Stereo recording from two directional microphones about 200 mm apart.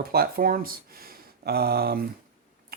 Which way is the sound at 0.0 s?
50° right (ahead or behind).